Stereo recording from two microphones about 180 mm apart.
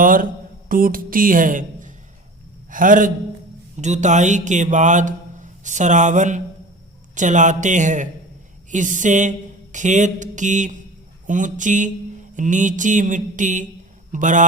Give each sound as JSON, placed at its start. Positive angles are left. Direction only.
{"t": 0.0, "sound": "a woman's voice", "side_deg": -50}